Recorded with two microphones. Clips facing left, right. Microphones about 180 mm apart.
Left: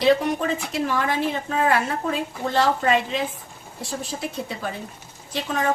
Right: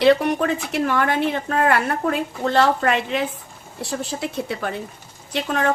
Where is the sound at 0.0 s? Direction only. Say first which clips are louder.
Right 3 dB; 65° right (ahead or behind).